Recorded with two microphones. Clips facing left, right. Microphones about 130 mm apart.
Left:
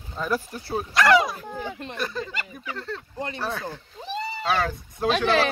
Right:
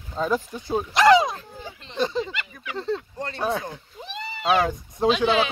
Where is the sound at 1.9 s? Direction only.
25° right (ahead or behind).